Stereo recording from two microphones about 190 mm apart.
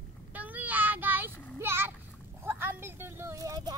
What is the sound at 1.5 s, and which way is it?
Speech, 10° right (ahead or behind).